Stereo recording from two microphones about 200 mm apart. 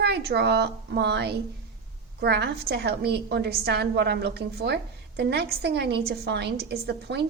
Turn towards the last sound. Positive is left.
turn(degrees=-55)  # may be behind; listen again after turning